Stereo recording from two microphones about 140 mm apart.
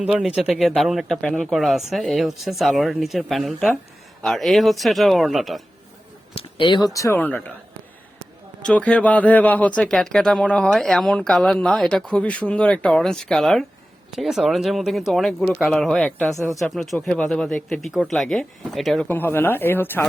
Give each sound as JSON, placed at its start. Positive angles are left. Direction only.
{"t": 0.0, "sound": "speech", "side_deg": -10}
{"t": 6.3, "sound": "speech", "side_deg": 35}
{"t": 8.6, "sound": "speech", "side_deg": 10}
{"t": 19.0, "sound": "speech", "side_deg": 15}